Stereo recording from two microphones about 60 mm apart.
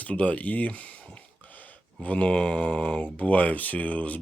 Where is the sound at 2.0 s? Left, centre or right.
Left.